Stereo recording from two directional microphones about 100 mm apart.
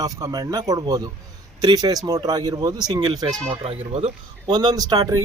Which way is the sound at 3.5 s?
80° right.